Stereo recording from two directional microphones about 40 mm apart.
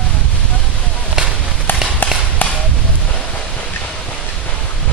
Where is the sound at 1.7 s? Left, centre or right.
Left.